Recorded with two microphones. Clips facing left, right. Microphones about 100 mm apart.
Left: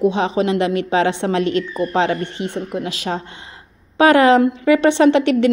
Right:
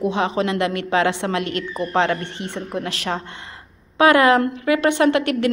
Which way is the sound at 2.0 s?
15° left (ahead or behind).